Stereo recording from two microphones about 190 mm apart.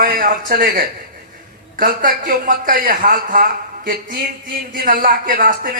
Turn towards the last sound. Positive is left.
turn(degrees=-45)  # may be behind; listen again after turning